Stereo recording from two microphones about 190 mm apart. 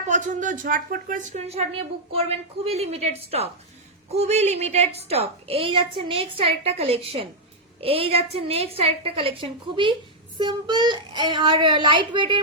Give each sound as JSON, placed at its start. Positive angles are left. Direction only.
{"t": 0.1, "sound": "speech", "side_deg": -40}